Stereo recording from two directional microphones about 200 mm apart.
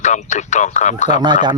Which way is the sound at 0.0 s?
35° left (ahead or behind).